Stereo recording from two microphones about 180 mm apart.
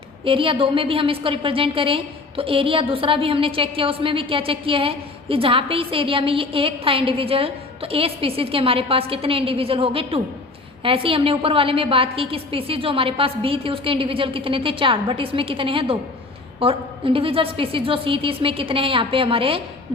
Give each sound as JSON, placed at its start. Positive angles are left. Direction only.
{"t": 0.3, "sound": "a woman's voice", "side_deg": -30}